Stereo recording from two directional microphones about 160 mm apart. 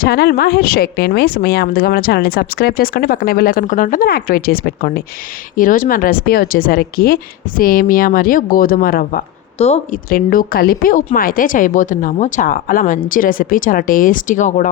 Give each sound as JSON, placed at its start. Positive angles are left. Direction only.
{"t": 0.0, "sound": "a woman's voice", "side_deg": 75}
{"t": 9.6, "sound": "speech", "side_deg": 40}
{"t": 10.1, "sound": "a woman's voice", "side_deg": 65}